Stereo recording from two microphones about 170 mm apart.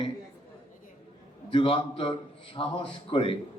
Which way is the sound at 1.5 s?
30° left (ahead or behind).